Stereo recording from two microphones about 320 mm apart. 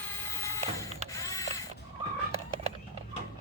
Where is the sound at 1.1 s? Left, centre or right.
Centre.